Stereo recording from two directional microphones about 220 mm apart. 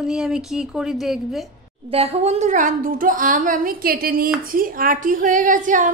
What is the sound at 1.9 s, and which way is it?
A woman's voice, 25° right (ahead or behind).